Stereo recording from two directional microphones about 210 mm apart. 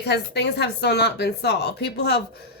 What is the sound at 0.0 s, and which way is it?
Speech, 50° left (ahead or behind).